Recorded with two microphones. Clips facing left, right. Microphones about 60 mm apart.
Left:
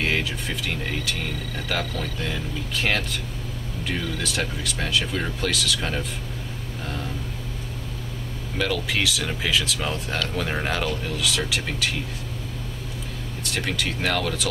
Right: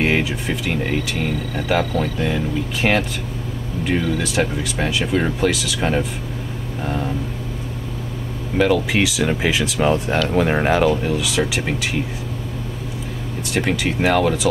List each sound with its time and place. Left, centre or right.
0.0 s speech: centre
8.5 s speech: centre
13.5 s speech: centre